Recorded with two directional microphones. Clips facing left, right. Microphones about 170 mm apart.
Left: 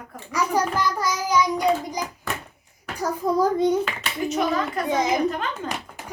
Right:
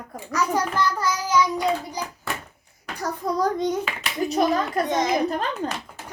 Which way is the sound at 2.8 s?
10° left (ahead or behind).